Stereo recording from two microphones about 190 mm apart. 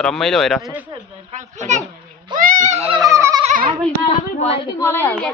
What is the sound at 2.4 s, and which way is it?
Goat, 45° right (ahead or behind).